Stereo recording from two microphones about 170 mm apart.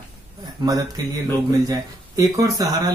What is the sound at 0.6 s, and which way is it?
Speech, 20° right (ahead or behind).